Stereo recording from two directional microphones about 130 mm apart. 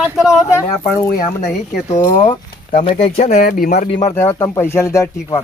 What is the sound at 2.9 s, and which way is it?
Speech, 60° left (ahead or behind).